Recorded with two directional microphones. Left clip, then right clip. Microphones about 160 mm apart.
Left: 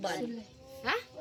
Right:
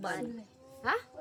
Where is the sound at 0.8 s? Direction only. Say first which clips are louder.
Right 1 dB; 50° right (ahead or behind).